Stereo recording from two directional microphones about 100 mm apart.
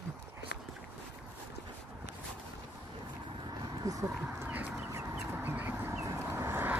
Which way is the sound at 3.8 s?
35° right (ahead or behind).